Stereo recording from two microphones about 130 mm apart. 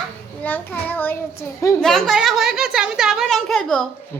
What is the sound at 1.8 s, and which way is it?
A woman's voice, centre (ahead or behind).